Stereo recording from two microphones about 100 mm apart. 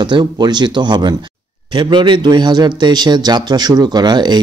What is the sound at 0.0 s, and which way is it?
A man's voice, 45° right (ahead or behind).